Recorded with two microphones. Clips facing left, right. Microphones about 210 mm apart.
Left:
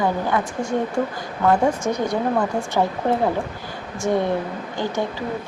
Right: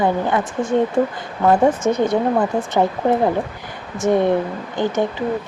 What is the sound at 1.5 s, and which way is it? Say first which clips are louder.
Speech: right 4 dB; 25° right (ahead or behind).